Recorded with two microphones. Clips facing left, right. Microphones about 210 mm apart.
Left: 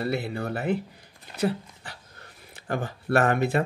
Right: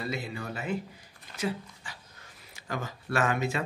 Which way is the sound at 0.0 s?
60° left (ahead or behind).